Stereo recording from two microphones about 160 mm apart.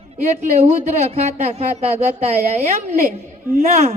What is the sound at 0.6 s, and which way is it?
Speech, 40° right (ahead or behind).